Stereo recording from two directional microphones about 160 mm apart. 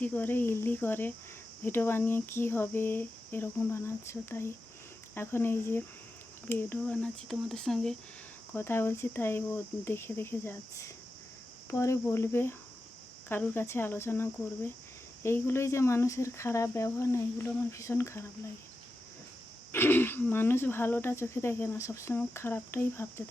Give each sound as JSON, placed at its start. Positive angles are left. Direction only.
{"t": 0.0, "sound": "speech", "side_deg": 10}
{"t": 8.5, "sound": "speech", "side_deg": 15}
{"t": 19.7, "sound": "speech", "side_deg": 15}